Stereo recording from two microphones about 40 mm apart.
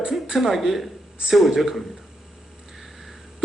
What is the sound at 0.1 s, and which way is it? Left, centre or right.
A man's voice, centre.